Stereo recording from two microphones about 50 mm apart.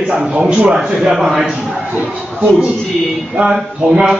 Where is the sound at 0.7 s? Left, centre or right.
Centre.